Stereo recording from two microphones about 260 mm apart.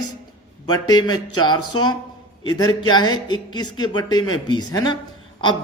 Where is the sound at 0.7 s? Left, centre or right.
Centre.